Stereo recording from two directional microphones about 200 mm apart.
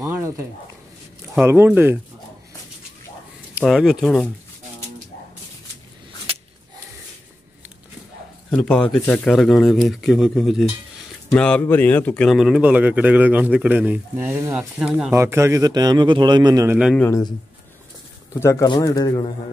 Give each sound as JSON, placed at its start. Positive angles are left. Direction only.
{"t": 0.0, "sound": "a sound", "side_deg": -15}
{"t": 1.3, "sound": "speech", "side_deg": -10}
{"t": 3.5, "sound": "speech", "side_deg": 0}
{"t": 6.3, "sound": "a sound", "side_deg": -30}
{"t": 8.5, "sound": "speech", "side_deg": 5}
{"t": 16.7, "sound": "speech", "side_deg": -5}
{"t": 17.0, "sound": "speech", "side_deg": 15}
{"t": 18.4, "sound": "speech", "side_deg": 15}